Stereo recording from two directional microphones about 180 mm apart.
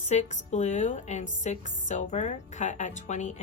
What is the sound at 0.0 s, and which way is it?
Speech, 40° left (ahead or behind).